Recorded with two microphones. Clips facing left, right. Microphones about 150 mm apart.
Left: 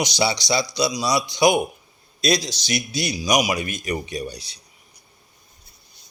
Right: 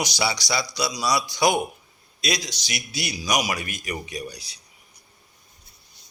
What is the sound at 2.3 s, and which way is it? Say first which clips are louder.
A man's voice: left 7 dB; 30° left (ahead or behind).